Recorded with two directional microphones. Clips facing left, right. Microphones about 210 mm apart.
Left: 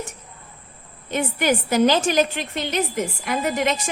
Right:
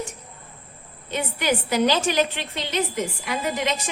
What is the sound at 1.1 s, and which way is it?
A woman's voice, 50° left (ahead or behind).